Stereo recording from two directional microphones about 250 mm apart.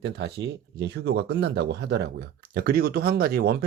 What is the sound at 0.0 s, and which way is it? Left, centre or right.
Speech, right.